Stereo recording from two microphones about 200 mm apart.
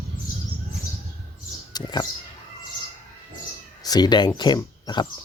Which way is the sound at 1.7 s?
20° left (ahead or behind).